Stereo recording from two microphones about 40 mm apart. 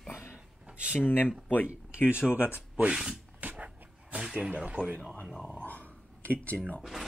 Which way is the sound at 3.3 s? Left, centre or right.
Right.